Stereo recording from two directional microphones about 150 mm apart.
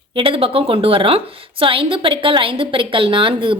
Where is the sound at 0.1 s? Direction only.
35° right (ahead or behind).